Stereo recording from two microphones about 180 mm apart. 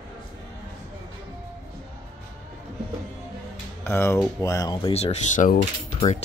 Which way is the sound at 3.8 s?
15° left (ahead or behind).